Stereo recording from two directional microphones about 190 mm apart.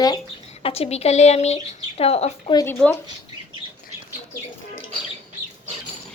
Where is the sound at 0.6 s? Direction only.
30° left (ahead or behind).